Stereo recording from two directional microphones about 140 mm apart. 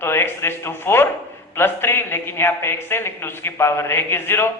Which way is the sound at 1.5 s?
15° left (ahead or behind).